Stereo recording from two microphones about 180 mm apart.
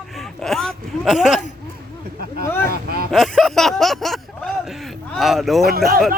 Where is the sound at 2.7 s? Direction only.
60° right (ahead or behind).